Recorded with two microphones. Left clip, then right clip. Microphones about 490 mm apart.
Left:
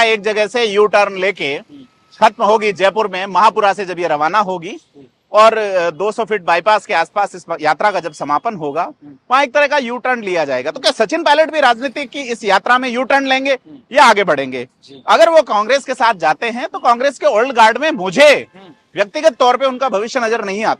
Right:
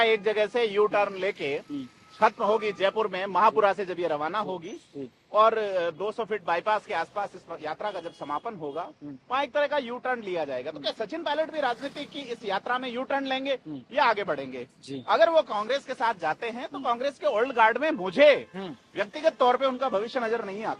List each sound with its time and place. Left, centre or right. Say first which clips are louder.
0.0 s a man's voice: left 10 dB; left
2.1 s a man's voice: left 12 dB; left
7.4 s speech: left 19 dB; left
11.2 s a man's voice: left 16 dB; left
13.9 s a man's voice: left 15 dB; left
14.3 s speech: left 15 dB; left
17.2 s speech: left 13 dB; left
17.4 s a man's voice: left 10 dB; left